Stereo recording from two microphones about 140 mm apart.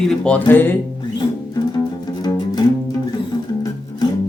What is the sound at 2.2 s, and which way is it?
Music, 30° left (ahead or behind).